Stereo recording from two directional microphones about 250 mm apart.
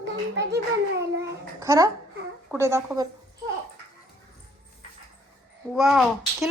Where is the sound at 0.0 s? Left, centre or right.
Right.